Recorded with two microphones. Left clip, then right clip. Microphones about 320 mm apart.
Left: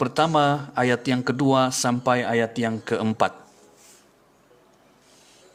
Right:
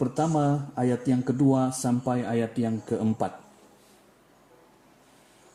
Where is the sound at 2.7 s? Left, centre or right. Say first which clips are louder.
Left 4 dB; left.